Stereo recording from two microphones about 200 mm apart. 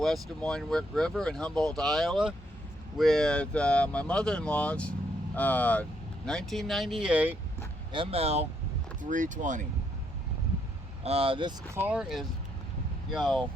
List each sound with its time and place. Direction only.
0.0 s speech: centre (ahead or behind)
7.9 s speech: 30° right (ahead or behind)
11.0 s speech: 30° right (ahead or behind)
11.7 s speech: 10° right (ahead or behind)